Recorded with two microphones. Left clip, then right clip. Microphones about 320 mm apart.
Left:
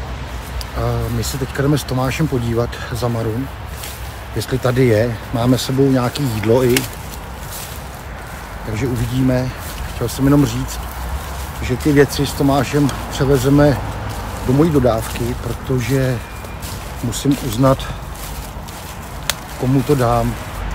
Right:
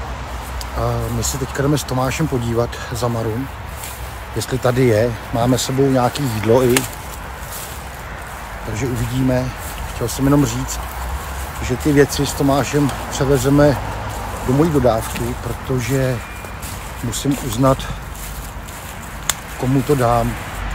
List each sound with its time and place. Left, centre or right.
0.7 s speech: centre
4.4 s speech: centre
8.7 s speech: centre
11.6 s speech: centre
19.8 s speech: centre